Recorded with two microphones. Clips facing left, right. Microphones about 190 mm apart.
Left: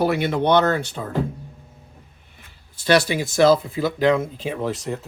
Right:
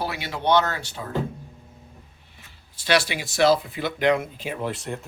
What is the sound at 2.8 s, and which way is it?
Speech, 45° left (ahead or behind).